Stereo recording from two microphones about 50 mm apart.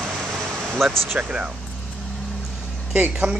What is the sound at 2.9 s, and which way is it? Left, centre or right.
Speech, right.